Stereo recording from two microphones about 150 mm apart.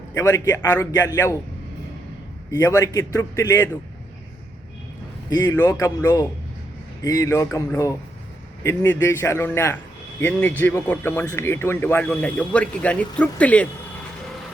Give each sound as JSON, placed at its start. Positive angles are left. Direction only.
{"t": 0.1, "sound": "a man's voice", "side_deg": 20}
{"t": 2.5, "sound": "a man's voice", "side_deg": 20}
{"t": 5.3, "sound": "a man's voice", "side_deg": 20}